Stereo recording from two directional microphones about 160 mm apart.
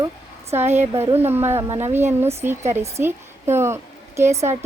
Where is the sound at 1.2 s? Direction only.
15° right (ahead or behind).